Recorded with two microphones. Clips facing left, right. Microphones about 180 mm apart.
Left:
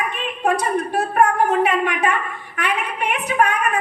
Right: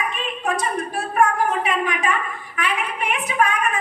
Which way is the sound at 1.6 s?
60° left (ahead or behind).